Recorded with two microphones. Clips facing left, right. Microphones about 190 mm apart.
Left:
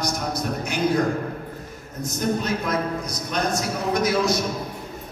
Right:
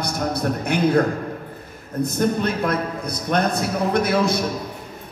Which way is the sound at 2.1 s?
60° right (ahead or behind).